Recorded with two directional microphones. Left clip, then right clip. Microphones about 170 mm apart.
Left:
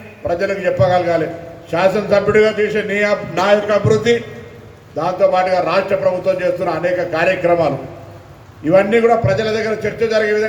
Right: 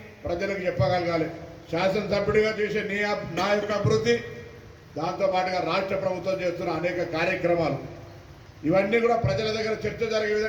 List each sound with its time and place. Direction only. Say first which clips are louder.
0.3 s a man's voice: left 11 dB; 35° left (ahead or behind)
8.7 s a man's voice: left 10 dB; 35° left (ahead or behind)